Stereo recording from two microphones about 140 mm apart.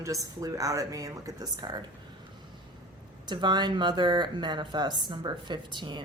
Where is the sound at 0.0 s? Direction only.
25° right (ahead or behind).